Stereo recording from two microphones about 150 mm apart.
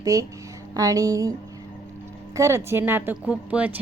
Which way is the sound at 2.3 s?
20° right (ahead or behind).